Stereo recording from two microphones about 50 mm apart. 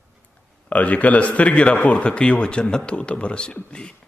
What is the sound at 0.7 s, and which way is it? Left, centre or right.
A man's voice, left.